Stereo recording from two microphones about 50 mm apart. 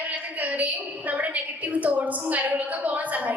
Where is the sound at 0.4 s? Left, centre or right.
Right.